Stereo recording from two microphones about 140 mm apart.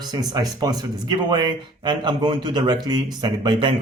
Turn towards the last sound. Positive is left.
turn(degrees=-30)  # may be behind; listen again after turning